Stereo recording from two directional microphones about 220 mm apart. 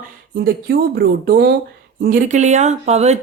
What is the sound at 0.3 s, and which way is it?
Speech, 45° right (ahead or behind).